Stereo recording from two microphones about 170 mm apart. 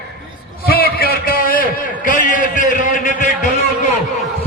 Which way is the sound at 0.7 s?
65° left (ahead or behind).